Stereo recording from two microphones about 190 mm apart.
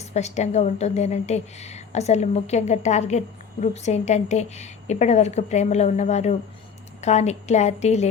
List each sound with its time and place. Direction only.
0.1 s a woman's voice: 35° left (ahead or behind)